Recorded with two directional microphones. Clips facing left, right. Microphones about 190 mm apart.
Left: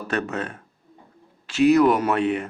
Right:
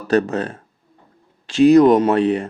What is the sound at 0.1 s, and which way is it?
Speech, 35° right (ahead or behind).